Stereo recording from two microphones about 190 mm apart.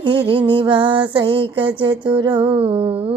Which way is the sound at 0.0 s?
25° right (ahead or behind).